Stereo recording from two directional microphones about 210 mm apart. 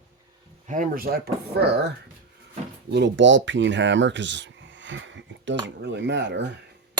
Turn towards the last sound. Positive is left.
turn(degrees=-55)  # may be behind; listen again after turning